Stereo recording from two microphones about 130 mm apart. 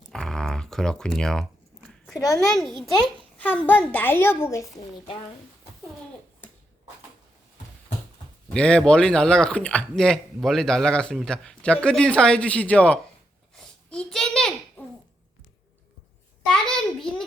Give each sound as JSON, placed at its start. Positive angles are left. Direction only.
{"t": 0.1, "sound": "typing", "side_deg": 5}
{"t": 2.1, "sound": "a child's voice", "side_deg": 25}
{"t": 2.5, "sound": "a child's voice", "side_deg": 0}
{"t": 3.3, "sound": "a child's voice", "side_deg": 15}
{"t": 5.0, "sound": "speech", "side_deg": 45}
{"t": 8.5, "sound": "a child's voice", "side_deg": 5}
{"t": 16.5, "sound": "a sound", "side_deg": 5}